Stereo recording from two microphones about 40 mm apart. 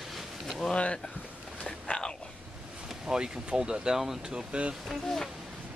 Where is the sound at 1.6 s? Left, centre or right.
Left.